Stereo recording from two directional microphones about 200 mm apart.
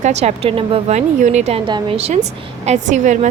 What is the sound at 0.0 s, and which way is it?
A woman's voice, 35° right (ahead or behind).